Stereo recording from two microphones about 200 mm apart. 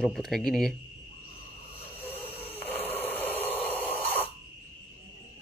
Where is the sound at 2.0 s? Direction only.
10° left (ahead or behind).